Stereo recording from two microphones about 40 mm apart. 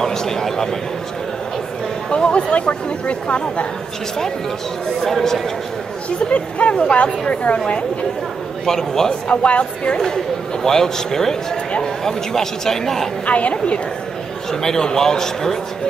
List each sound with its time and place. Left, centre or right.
0.0 s a sound: centre
2.0 s a woman's voice: left
5.0 s speech: centre
6.0 s a woman's voice: left
8.6 s speech: centre
9.3 s a woman's voice: left
9.9 s speech: centre
13.3 s speech: left
14.5 s speech: centre